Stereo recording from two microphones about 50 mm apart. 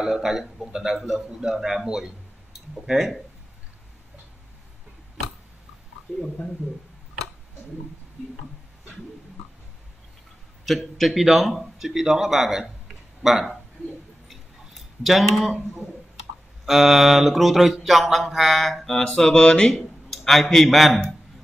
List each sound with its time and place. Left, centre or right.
0.0 s a man's voice: centre
11.0 s a man's voice: centre
14.2 s a sound: centre
16.6 s mantra: centre
19.7 s a man's voice: centre